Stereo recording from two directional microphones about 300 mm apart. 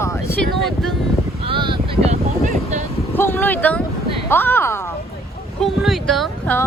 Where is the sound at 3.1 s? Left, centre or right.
Centre.